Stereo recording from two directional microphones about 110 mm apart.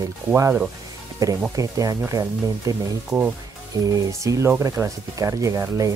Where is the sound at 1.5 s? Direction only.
30° right (ahead or behind).